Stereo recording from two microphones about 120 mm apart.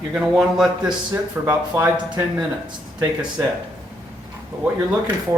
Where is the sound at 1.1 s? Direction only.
30° right (ahead or behind).